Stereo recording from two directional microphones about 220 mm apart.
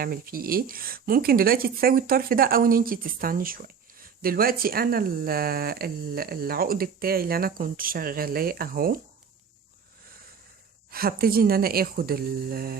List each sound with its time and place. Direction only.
0.0 s speech: 40° right (ahead or behind)
10.9 s speech: 40° right (ahead or behind)